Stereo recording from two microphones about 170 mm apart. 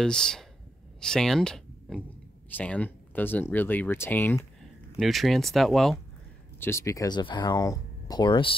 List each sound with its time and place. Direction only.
0.0 s speech: 5° left (ahead or behind)
4.9 s speech: centre (ahead or behind)
6.6 s speech: 15° left (ahead or behind)